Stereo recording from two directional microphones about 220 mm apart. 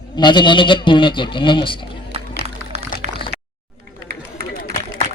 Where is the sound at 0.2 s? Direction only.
20° left (ahead or behind).